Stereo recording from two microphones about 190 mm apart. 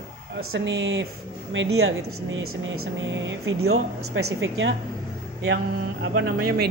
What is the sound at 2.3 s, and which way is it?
Speech, 90° right.